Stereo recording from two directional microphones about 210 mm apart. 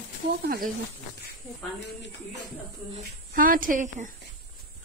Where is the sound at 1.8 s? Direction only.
55° left (ahead or behind).